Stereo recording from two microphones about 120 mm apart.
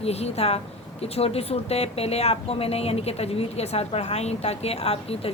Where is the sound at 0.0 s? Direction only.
60° left (ahead or behind).